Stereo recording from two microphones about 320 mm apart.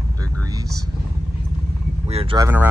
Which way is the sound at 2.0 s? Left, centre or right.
Centre.